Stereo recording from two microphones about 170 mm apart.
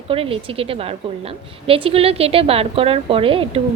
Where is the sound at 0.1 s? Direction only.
35° right (ahead or behind).